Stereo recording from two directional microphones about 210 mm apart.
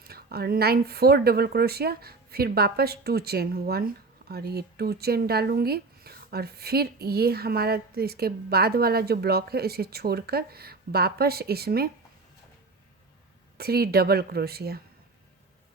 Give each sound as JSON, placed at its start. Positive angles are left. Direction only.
{"t": 0.0, "sound": "speech", "side_deg": -50}
{"t": 13.6, "sound": "speech", "side_deg": -50}